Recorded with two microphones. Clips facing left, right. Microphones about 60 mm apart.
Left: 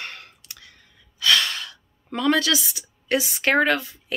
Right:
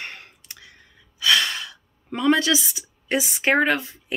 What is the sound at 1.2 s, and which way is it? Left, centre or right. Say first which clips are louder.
Gasp: even; centre.